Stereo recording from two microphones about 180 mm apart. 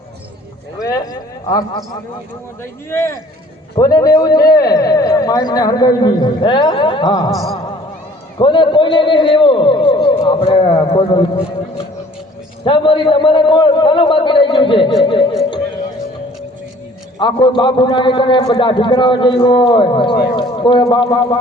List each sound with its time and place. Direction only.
0.8 s a sound: 20° left (ahead or behind)
1.5 s a man's voice: 20° left (ahead or behind)
2.9 s a man's voice: 15° left (ahead or behind)
8.4 s a man's voice: 25° left (ahead or behind)
12.6 s a man's voice: 25° left (ahead or behind)
17.2 s a man's voice: 25° left (ahead or behind)